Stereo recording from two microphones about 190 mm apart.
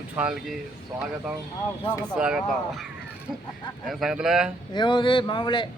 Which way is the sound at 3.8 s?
Centre (ahead or behind).